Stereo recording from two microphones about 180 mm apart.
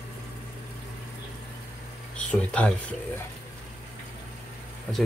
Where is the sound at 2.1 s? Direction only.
5° left (ahead or behind).